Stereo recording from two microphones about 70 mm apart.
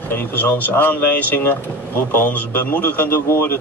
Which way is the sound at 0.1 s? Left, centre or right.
Left.